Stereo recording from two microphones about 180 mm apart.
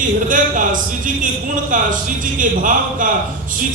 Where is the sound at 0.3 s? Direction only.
45° right (ahead or behind).